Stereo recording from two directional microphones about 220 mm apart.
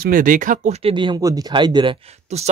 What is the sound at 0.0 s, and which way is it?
Speech, 40° right (ahead or behind).